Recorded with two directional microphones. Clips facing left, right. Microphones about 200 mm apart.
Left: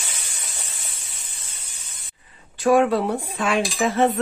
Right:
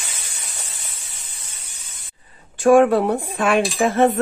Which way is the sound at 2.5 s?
50° right (ahead or behind).